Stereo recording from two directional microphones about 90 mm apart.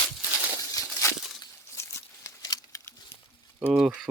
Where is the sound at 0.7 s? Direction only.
35° left (ahead or behind).